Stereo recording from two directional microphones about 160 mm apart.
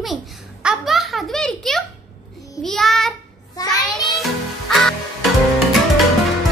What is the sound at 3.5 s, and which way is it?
Child singing, 25° left (ahead or behind).